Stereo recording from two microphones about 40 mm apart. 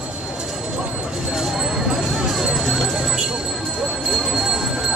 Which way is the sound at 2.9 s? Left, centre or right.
Centre.